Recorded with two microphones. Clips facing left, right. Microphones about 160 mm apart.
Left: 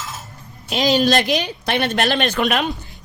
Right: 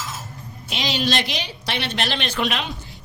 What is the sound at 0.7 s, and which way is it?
A woman's voice, 45° left (ahead or behind).